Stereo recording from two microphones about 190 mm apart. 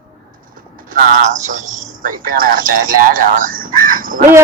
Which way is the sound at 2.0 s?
50° right (ahead or behind).